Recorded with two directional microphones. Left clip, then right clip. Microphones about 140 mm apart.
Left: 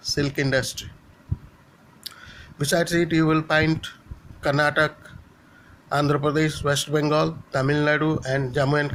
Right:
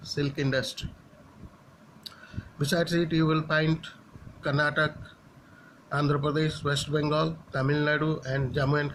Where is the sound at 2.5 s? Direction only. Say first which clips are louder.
Left 5 dB; 45° left (ahead or behind).